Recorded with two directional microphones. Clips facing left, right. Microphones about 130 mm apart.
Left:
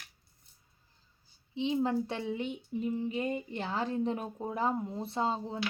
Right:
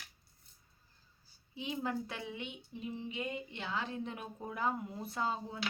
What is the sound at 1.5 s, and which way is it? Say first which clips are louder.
A woman's voice: left 8 dB; 25° left (ahead or behind).